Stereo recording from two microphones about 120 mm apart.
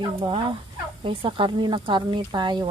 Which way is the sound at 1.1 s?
45° right (ahead or behind).